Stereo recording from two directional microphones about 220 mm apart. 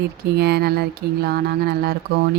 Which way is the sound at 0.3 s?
50° right (ahead or behind).